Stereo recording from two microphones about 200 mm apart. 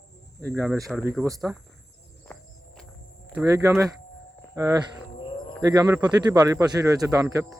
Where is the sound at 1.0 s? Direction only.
10° right (ahead or behind).